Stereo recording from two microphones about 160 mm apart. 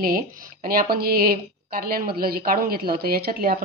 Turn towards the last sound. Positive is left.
turn(degrees=-65)  # may be behind; listen again after turning